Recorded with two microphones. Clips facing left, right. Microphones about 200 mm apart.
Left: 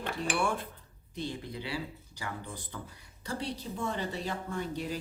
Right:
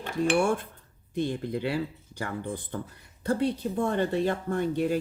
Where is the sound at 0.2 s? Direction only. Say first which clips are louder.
Right 9 dB; 50° right (ahead or behind).